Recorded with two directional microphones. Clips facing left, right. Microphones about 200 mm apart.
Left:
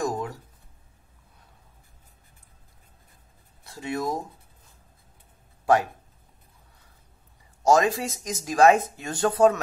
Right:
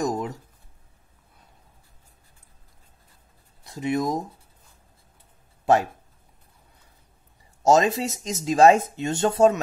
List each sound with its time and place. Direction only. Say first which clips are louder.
0.0 s a sound: right 2 dB; 20° right (ahead or behind)
3.6 s speech: right 4 dB; 20° right (ahead or behind)
7.6 s speech: right 2 dB; 25° right (ahead or behind)